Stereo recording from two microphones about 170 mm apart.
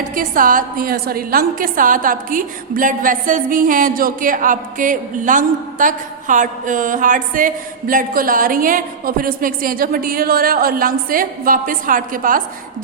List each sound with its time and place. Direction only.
0.1 s a woman's voice: 55° right (ahead or behind)